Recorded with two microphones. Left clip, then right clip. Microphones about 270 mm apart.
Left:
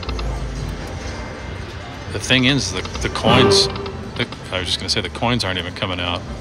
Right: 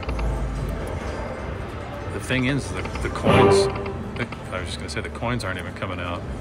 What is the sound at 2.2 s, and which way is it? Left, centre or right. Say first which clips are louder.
Speech: left 9 dB; centre.